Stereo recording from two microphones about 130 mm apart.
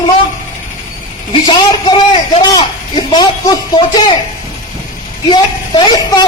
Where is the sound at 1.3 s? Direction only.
40° left (ahead or behind).